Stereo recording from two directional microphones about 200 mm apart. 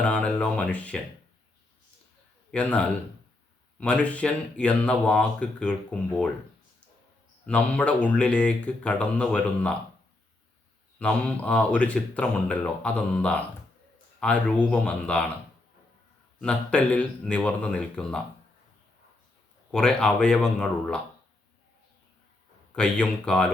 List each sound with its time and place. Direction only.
0.0 s speech: 5° left (ahead or behind)
2.5 s speech: 5° left (ahead or behind)
7.4 s speech: 5° left (ahead or behind)
11.0 s speech: 5° left (ahead or behind)
16.4 s speech: 5° left (ahead or behind)
19.7 s speech: 5° left (ahead or behind)
22.7 s speech: 5° left (ahead or behind)